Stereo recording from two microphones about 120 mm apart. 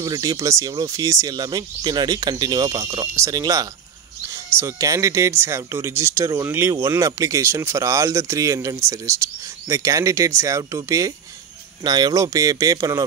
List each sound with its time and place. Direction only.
0.0 s speech: 30° right (ahead or behind)